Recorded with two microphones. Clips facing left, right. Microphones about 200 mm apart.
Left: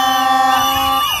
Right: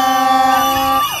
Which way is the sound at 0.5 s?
50° right (ahead or behind).